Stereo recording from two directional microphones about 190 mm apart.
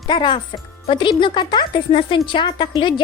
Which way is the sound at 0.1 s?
25° left (ahead or behind).